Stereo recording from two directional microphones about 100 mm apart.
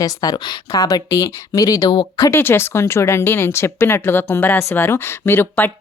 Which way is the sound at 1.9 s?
50° left (ahead or behind).